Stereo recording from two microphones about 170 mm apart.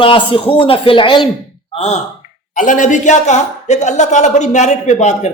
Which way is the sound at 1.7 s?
40° left (ahead or behind).